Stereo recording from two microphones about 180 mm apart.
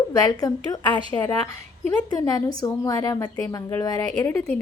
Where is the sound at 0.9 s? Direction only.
25° left (ahead or behind).